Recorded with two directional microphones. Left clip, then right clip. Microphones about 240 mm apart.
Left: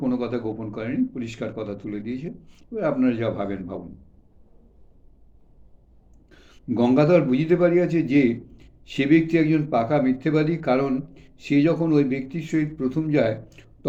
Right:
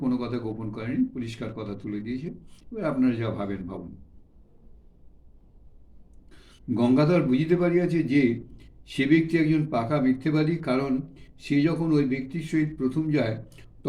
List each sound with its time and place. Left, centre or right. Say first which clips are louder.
0.0 s a man's voice: left 3 dB; centre
6.7 s a man's voice: left 4 dB; centre